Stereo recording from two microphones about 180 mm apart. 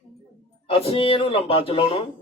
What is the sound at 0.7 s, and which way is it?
A man's voice, 30° left (ahead or behind).